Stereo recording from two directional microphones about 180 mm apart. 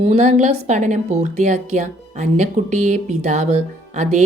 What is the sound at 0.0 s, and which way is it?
A woman's voice, 35° right (ahead or behind).